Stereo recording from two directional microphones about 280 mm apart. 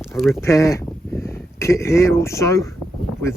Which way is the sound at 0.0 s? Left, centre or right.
Centre.